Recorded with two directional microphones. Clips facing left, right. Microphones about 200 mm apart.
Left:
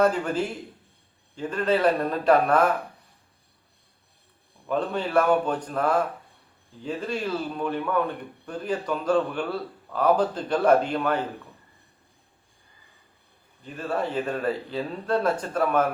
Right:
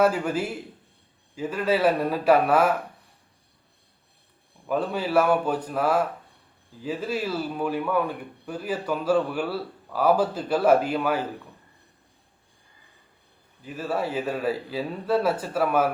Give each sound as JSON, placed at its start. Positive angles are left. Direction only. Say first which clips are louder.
{"t": 0.0, "sound": "a man's voice", "louder": "even", "side_deg": -5}
{"t": 4.6, "sound": "a man's voice", "louder": "even", "side_deg": -5}
{"t": 13.7, "sound": "a man's voice", "louder": "even", "side_deg": -5}